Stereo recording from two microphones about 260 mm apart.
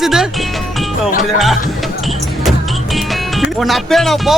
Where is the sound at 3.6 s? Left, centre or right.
Centre.